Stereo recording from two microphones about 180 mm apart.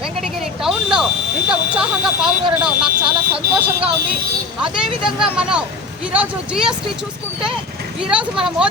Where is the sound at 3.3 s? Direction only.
30° right (ahead or behind).